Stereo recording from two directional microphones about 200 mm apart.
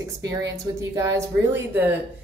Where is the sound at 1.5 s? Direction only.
10° right (ahead or behind).